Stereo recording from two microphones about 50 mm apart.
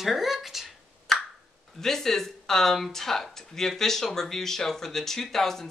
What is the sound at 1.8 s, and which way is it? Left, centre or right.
Speech, centre.